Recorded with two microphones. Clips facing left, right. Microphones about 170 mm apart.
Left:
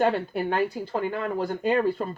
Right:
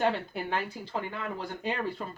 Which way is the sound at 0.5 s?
45° left (ahead or behind).